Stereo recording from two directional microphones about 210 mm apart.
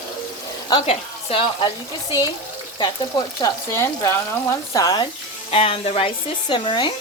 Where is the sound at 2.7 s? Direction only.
20° left (ahead or behind).